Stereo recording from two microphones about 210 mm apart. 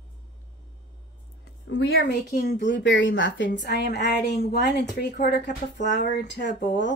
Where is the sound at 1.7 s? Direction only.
65° left (ahead or behind).